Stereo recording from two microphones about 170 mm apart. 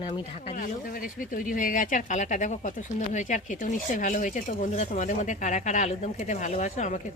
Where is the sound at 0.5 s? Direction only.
55° left (ahead or behind).